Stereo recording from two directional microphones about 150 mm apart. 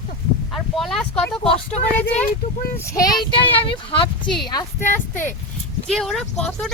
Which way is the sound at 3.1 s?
30° left (ahead or behind).